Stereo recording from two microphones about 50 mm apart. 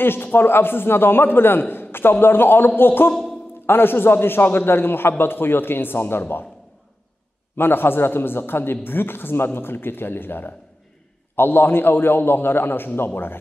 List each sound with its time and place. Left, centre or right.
0.0 s a man's voice: left
7.5 s a man's voice: left